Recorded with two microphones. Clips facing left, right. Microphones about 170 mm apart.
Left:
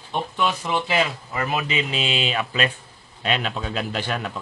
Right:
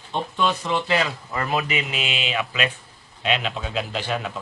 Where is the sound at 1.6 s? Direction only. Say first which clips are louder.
Left 2 dB; 30° left (ahead or behind).